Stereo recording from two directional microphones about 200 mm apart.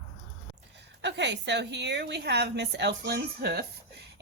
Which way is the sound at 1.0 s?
60° right (ahead or behind).